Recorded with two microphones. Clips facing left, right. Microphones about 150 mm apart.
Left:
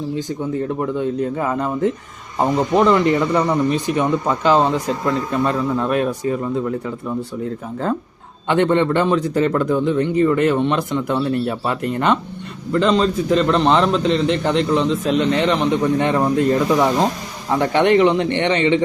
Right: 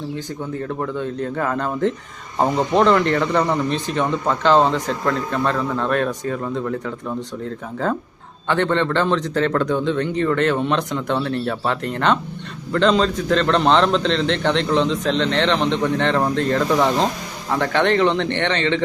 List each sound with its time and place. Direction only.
0.8 s speech: 15° left (ahead or behind)
8.4 s a man's voice: 15° left (ahead or behind)